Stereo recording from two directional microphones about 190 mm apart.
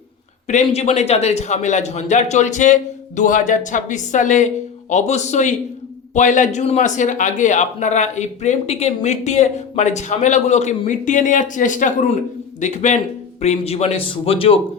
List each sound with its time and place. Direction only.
0.4 s a man's voice: 35° left (ahead or behind)